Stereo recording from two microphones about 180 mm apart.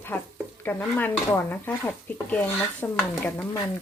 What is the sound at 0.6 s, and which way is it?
Speech, 10° left (ahead or behind).